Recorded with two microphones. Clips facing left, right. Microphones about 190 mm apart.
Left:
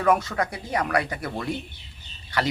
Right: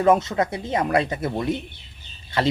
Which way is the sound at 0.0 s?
25° right (ahead or behind).